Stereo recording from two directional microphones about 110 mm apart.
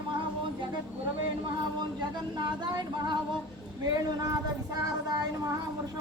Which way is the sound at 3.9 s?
35° right (ahead or behind).